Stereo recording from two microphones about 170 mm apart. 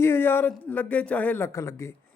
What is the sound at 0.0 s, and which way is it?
A man's voice, 15° left (ahead or behind).